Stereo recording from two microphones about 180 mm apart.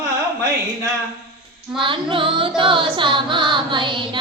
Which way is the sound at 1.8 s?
30° right (ahead or behind).